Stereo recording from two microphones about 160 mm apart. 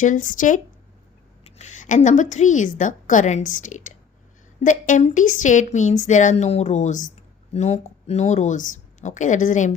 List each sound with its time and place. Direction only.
0.0 s a woman's voice: 55° left (ahead or behind)